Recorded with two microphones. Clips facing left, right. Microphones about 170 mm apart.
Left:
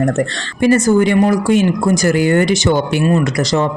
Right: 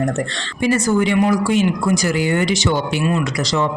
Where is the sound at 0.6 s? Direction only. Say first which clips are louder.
Left 5 dB; 45° left (ahead or behind).